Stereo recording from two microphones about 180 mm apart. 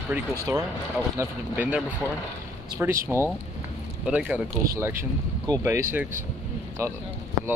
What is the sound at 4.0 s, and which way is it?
Speech, 5° right (ahead or behind).